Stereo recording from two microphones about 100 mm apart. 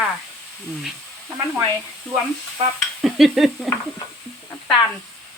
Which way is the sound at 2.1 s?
10° left (ahead or behind).